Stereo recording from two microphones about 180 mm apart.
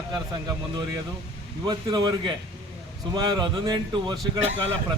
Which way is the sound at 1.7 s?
25° right (ahead or behind).